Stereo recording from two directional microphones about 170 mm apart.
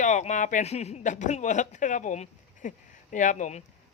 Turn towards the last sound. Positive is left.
turn(degrees=45)  # may be behind; listen again after turning